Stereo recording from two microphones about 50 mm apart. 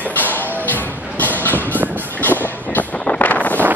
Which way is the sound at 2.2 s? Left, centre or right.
Left.